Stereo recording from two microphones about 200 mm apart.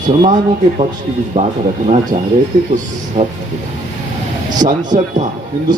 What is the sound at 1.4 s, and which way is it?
Speech, 40° right (ahead or behind).